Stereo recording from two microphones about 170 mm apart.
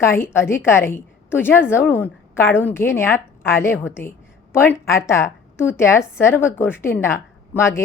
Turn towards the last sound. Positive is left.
turn(degrees=15)  # may be behind; listen again after turning